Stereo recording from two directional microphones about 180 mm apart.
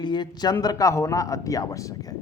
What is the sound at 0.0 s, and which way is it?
A man's voice, 25° left (ahead or behind).